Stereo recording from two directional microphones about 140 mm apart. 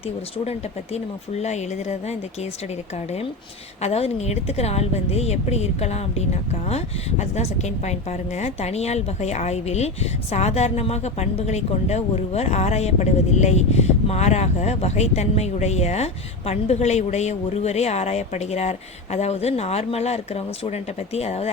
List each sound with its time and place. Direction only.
0.9 s speech: 55° left (ahead or behind)
3.8 s speech: 50° left (ahead or behind)